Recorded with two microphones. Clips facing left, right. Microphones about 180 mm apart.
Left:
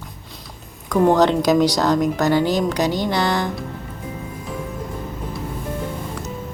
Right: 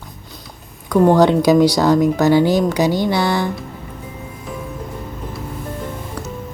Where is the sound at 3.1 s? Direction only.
5° right (ahead or behind).